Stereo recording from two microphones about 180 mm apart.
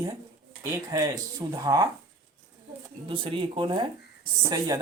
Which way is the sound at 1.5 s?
20° right (ahead or behind).